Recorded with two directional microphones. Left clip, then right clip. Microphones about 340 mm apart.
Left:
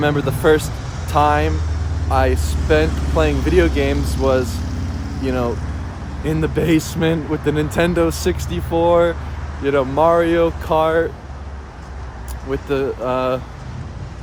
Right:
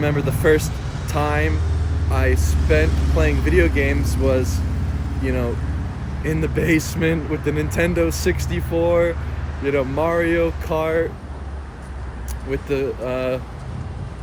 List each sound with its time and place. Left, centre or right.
0.0 s speech: centre
12.5 s speech: centre